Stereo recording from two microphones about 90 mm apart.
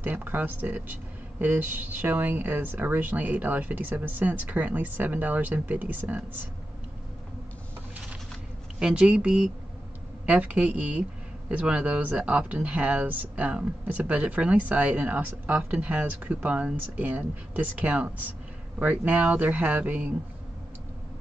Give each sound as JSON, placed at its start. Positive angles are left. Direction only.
{"t": 0.0, "sound": "speech", "side_deg": -20}
{"t": 8.7, "sound": "speech", "side_deg": -10}